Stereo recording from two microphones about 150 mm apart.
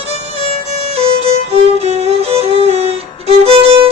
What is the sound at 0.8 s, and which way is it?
Music, 45° right (ahead or behind).